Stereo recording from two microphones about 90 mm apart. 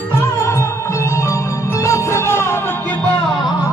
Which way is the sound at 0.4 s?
30° left (ahead or behind).